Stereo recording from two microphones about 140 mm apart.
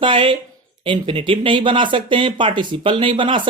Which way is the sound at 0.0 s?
40° right (ahead or behind).